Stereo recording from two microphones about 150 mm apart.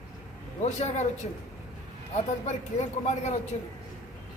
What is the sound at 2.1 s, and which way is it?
Speech, 50° left (ahead or behind).